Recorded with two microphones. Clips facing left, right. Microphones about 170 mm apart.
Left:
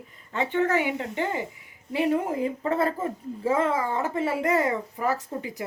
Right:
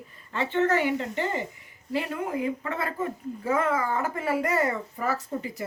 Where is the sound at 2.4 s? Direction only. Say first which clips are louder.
Left 4 dB; 35° left (ahead or behind).